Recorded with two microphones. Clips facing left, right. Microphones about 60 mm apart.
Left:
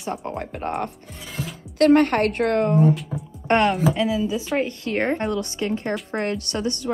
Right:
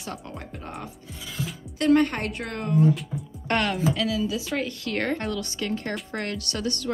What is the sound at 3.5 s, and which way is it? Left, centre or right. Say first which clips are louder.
A woman's voice: left 6 dB; left.